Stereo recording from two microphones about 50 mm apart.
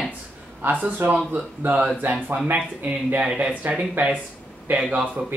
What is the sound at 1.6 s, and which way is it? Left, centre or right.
Speech, right.